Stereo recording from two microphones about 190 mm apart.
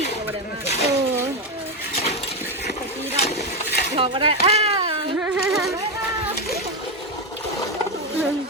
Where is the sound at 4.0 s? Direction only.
25° right (ahead or behind).